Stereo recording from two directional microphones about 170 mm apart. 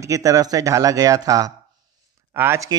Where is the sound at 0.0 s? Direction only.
20° right (ahead or behind).